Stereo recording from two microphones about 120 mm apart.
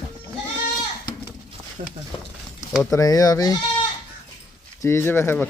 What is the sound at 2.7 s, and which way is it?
Speech, centre (ahead or behind).